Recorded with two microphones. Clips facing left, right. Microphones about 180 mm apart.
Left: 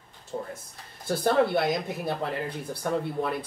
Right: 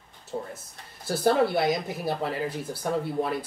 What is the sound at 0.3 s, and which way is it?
Speech, 15° right (ahead or behind).